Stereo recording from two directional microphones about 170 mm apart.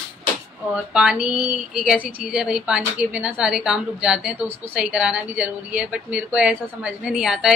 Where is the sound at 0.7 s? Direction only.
5° right (ahead or behind).